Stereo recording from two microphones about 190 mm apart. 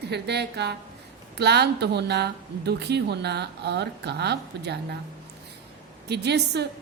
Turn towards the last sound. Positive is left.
turn(degrees=-60)  # may be behind; listen again after turning